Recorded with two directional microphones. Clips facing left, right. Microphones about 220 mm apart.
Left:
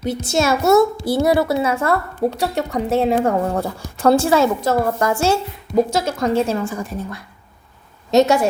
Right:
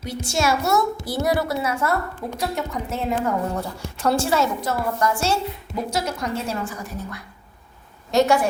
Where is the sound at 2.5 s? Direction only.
75° left (ahead or behind).